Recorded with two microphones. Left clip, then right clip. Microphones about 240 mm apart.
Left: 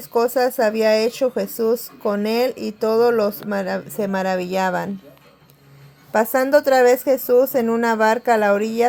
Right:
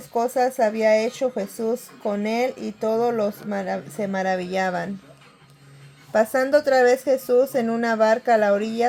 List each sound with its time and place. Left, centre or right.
0.1 s speech: left
6.1 s speech: left